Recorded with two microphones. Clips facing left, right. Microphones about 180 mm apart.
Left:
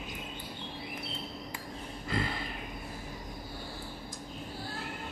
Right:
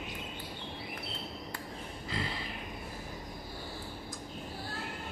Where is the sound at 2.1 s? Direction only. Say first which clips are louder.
Left 4 dB; 50° left (ahead or behind).